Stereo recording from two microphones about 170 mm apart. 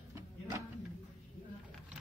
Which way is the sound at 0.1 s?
20° right (ahead or behind).